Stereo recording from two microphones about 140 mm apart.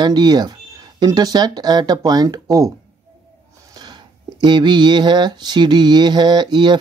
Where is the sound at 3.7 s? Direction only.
30° right (ahead or behind).